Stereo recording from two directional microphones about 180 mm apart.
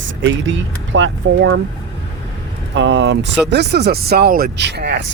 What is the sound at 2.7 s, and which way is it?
Speech, 85° right.